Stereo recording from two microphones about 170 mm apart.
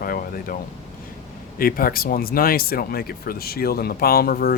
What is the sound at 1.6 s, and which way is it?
Speech, 60° left (ahead or behind).